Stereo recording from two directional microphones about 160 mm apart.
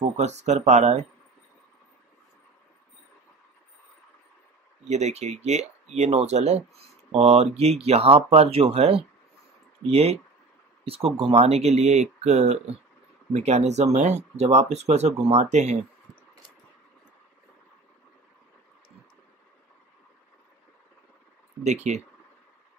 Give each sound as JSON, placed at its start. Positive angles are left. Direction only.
{"t": 0.2, "sound": "speech", "side_deg": -45}
{"t": 4.8, "sound": "speech", "side_deg": -45}
{"t": 21.6, "sound": "speech", "side_deg": -45}